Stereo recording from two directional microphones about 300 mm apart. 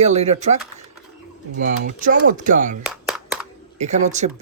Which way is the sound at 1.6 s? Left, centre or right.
Right.